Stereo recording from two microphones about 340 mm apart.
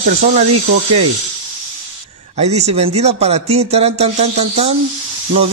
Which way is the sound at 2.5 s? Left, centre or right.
Centre.